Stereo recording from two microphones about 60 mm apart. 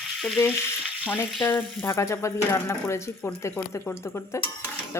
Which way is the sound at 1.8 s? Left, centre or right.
Left.